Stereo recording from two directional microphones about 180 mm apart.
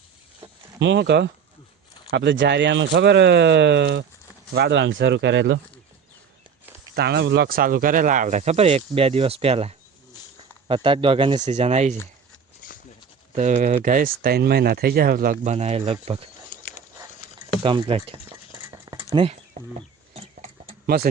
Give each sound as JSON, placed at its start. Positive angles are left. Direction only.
{"t": 0.8, "sound": "speech", "side_deg": -80}
{"t": 6.9, "sound": "speech", "side_deg": -65}
{"t": 13.3, "sound": "speech", "side_deg": -45}
{"t": 15.5, "sound": "speech", "side_deg": -35}
{"t": 17.6, "sound": "speech", "side_deg": -30}
{"t": 18.3, "sound": "a sound", "side_deg": -15}
{"t": 19.1, "sound": "speech", "side_deg": -30}
{"t": 20.1, "sound": "a sound", "side_deg": -35}
{"t": 20.8, "sound": "speech", "side_deg": -55}